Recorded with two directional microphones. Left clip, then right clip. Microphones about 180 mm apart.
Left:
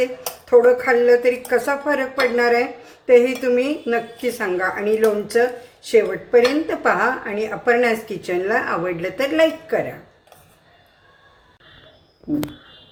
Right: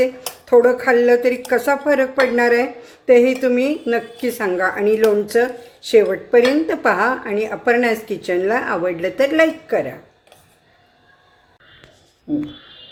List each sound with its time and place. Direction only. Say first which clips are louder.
0.5 s a woman's voice: right 1 dB; 25° right (ahead or behind)